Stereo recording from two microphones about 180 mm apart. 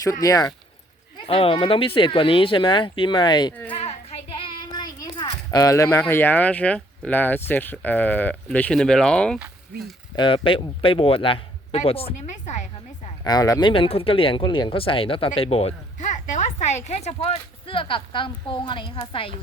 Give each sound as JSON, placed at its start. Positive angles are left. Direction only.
{"t": 0.0, "sound": "speech", "side_deg": 20}
{"t": 1.3, "sound": "speech", "side_deg": 30}
{"t": 3.8, "sound": "child singing", "side_deg": 35}
{"t": 6.0, "sound": "speech", "side_deg": 10}
{"t": 10.2, "sound": "speech", "side_deg": 30}
{"t": 13.2, "sound": "speech", "side_deg": 20}